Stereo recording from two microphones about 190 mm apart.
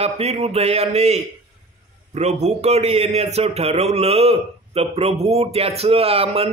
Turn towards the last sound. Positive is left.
turn(degrees=-30)  # may be behind; listen again after turning